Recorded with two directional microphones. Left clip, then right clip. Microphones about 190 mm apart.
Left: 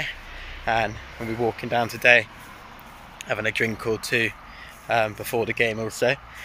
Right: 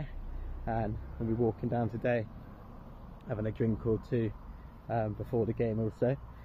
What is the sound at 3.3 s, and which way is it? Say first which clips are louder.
Speech: left 12 dB; 5° left (ahead or behind).